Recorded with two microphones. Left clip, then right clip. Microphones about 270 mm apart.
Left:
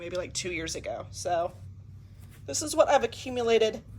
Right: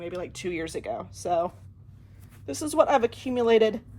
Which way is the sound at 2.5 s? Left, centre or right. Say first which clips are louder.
Right 1 dB; right.